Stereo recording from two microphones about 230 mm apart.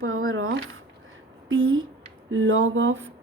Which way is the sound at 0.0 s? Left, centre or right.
Right.